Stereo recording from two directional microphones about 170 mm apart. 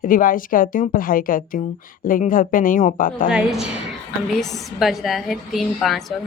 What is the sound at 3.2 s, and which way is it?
A woman's voice, 5° right (ahead or behind).